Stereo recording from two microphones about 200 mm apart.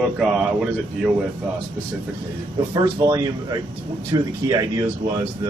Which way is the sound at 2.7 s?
20° right (ahead or behind).